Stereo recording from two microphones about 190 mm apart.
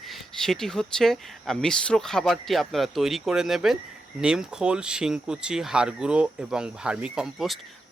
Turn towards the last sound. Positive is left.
turn(degrees=-5)  # may be behind; listen again after turning